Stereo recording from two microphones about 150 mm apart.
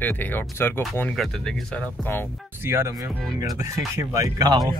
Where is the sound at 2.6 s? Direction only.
15° right (ahead or behind).